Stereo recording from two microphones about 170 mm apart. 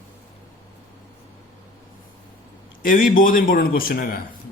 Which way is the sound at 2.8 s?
55° left (ahead or behind).